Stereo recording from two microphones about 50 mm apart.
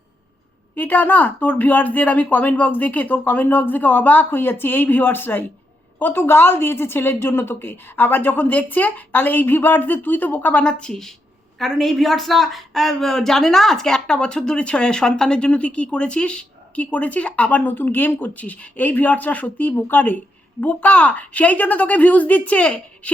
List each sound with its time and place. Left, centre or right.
0.8 s a woman's voice: left
10.6 s speech: centre
11.6 s speech: centre; by 23.1 s left